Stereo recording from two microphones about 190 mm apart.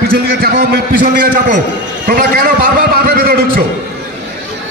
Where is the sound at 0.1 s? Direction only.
50° right (ahead or behind).